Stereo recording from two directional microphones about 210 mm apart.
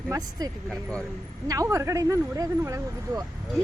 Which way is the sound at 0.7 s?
5° left (ahead or behind).